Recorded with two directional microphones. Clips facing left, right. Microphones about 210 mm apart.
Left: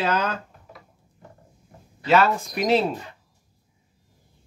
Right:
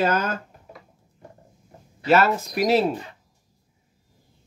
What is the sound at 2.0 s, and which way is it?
Speech, 45° right (ahead or behind).